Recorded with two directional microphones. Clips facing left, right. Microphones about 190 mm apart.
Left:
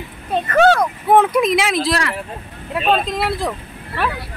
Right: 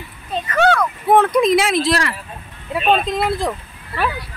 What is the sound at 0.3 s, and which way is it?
Speech, 55° left (ahead or behind).